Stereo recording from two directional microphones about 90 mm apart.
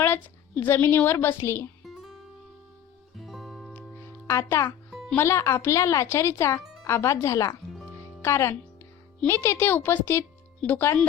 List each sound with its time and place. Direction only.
0.0 s a woman's voice: 20° left (ahead or behind)
1.8 s music: centre (ahead or behind)
3.2 s music: centre (ahead or behind)
4.3 s speech: 30° left (ahead or behind)